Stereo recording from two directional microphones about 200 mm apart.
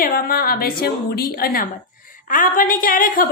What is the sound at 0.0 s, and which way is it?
A woman's voice, 45° left (ahead or behind).